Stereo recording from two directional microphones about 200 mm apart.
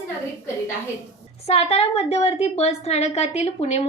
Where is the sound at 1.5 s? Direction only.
30° left (ahead or behind).